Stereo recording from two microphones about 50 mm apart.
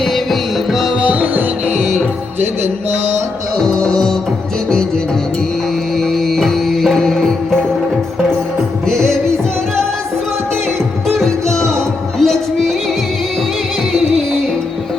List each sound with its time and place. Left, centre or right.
0.0 s music: centre
1.0 s music: right
3.8 s music: centre
6.0 s music: centre
8.9 s music: centre
11.4 s music: centre